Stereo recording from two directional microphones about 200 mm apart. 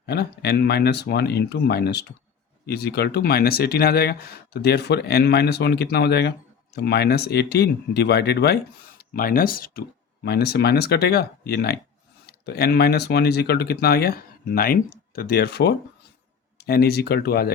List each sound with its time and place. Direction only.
0.0 s speech: 55° left (ahead or behind)